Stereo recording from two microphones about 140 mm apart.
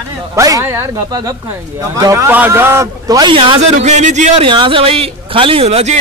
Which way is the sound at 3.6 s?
60° right (ahead or behind).